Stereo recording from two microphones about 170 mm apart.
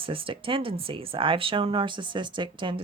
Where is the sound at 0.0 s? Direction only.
30° right (ahead or behind).